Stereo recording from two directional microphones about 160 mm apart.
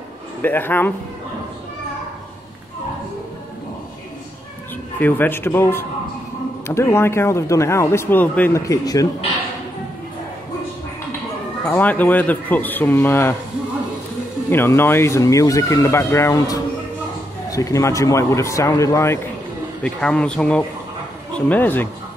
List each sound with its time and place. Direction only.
0.4 s speech: 10° left (ahead or behind)
4.9 s speech: 10° left (ahead or behind)
11.6 s speech: 10° left (ahead or behind)
14.5 s a man's voice: 15° left (ahead or behind)
19.8 s speech: 5° left (ahead or behind)